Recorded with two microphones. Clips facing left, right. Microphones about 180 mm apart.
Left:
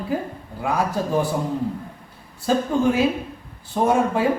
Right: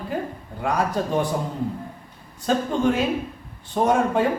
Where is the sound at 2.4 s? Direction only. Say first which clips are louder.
Left 2 dB; 5° left (ahead or behind).